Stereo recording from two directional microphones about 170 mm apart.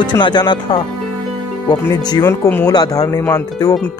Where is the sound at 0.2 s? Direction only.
25° left (ahead or behind).